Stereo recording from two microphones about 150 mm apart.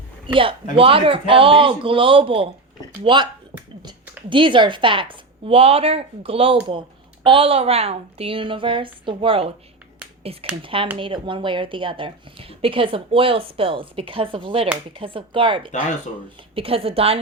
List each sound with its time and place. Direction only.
0.3 s speech: 35° right (ahead or behind)
4.3 s speech: 35° right (ahead or behind)